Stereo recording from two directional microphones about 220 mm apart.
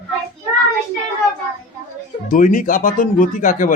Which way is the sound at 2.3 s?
35° left (ahead or behind).